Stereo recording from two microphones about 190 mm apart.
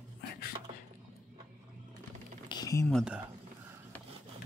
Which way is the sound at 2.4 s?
20° left (ahead or behind).